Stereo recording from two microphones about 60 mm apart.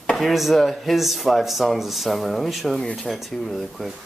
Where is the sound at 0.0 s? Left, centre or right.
Centre.